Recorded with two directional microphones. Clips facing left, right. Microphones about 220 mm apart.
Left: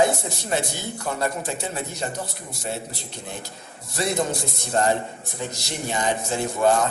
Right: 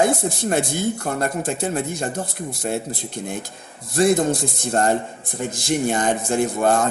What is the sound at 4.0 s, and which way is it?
Speech, 50° right (ahead or behind).